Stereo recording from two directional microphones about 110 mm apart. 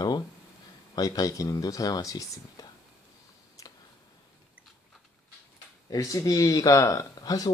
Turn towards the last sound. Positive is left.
turn(degrees=35)  # may be behind; listen again after turning